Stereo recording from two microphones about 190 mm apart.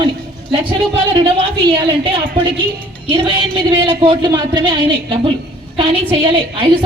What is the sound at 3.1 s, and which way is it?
A man's voice, 25° right (ahead or behind).